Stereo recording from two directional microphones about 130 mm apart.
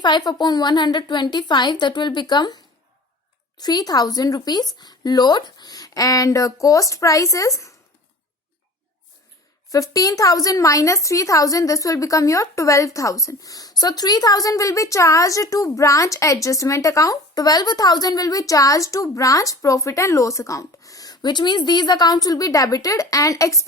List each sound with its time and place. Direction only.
0.0 s a woman's voice: 35° left (ahead or behind)
3.6 s speech: 30° left (ahead or behind)
9.7 s speech: 25° left (ahead or behind)